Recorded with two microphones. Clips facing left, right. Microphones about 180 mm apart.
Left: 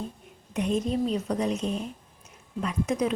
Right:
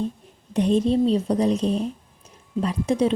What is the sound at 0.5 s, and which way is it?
A woman's voice, 35° right (ahead or behind).